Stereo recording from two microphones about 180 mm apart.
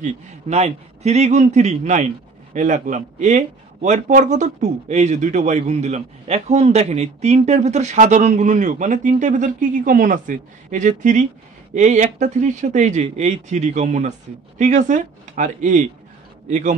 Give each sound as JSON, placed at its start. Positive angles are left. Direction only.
{"t": 0.0, "sound": "a man's voice", "side_deg": -40}